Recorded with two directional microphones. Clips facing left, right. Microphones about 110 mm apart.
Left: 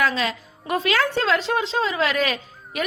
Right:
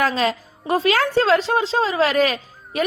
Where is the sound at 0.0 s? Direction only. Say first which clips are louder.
Right 3 dB; 40° right (ahead or behind).